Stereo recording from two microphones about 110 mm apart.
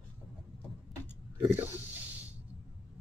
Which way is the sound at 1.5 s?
20° right (ahead or behind).